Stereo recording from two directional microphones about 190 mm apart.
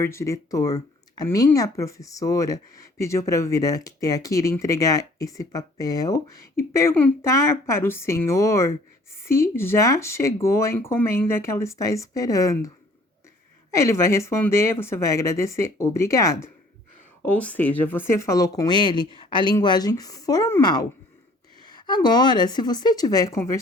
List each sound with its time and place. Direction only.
0.0 s speech: 15° left (ahead or behind)